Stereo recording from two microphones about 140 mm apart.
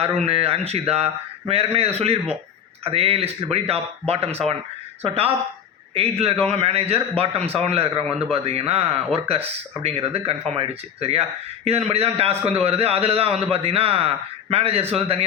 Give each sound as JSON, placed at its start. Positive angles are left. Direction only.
{"t": 0.0, "sound": "speech", "side_deg": -45}
{"t": 5.9, "sound": "speech", "side_deg": -45}